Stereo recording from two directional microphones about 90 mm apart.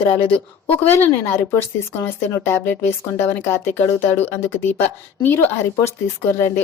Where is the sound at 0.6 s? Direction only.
20° left (ahead or behind).